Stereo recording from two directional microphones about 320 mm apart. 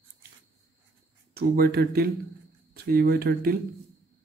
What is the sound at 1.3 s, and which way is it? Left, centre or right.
Speech, right.